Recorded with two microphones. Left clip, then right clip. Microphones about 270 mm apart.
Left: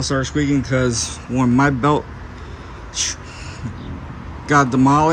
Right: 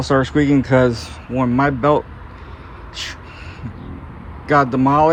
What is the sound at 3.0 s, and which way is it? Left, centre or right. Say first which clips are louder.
Gasp: left 5 dB; centre.